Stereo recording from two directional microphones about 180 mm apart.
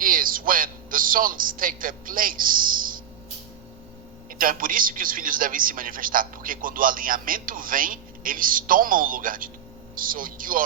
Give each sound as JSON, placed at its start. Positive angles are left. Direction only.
{"t": 0.0, "sound": "a man's voice", "side_deg": -50}
{"t": 4.3, "sound": "a man's voice", "side_deg": -50}